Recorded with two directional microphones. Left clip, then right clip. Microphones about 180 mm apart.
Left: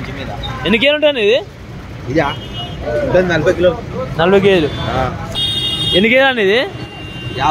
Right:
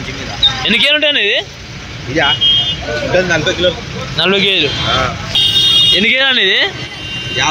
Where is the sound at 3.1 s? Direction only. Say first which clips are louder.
Even; 60° left (ahead or behind).